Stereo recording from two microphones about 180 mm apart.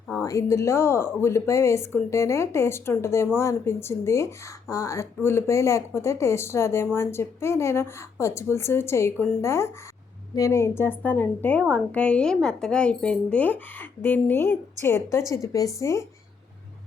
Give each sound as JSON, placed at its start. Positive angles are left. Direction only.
{"t": 0.2, "sound": "speech", "side_deg": 15}